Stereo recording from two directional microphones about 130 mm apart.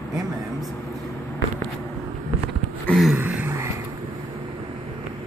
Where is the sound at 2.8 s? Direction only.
Centre (ahead or behind).